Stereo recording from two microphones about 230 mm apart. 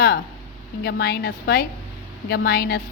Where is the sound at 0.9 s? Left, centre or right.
Left.